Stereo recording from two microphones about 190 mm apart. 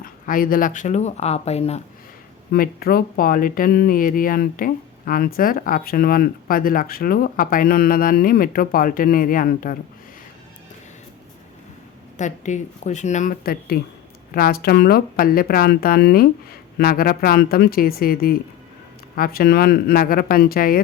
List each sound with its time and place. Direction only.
0.0 s speech: 45° left (ahead or behind)
2.5 s speech: 50° left (ahead or behind)
12.1 s speech: 40° left (ahead or behind)